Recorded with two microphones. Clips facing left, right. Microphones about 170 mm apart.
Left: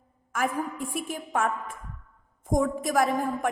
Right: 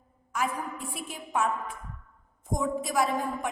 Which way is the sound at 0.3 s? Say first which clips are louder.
Left 3 dB; 50° left (ahead or behind).